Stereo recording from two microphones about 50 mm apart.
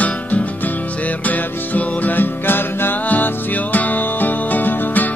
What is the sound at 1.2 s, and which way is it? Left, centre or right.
Music, left.